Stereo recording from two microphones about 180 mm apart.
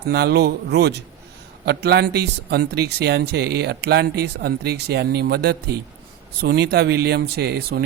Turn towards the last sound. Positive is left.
turn(degrees=-60)  # may be behind; listen again after turning